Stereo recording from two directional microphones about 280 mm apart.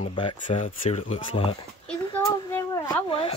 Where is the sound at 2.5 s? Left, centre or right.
Centre.